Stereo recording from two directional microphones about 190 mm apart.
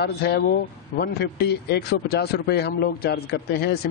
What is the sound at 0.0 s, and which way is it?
Speech, 60° left (ahead or behind).